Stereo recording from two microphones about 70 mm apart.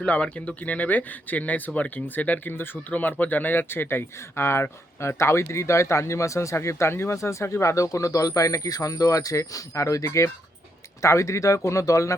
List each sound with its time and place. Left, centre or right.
0.0 s speech: centre; by 12.1 s left